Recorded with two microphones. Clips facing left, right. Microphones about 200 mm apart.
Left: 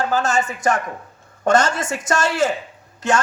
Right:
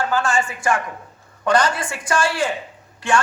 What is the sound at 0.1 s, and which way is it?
Speech, 40° left (ahead or behind).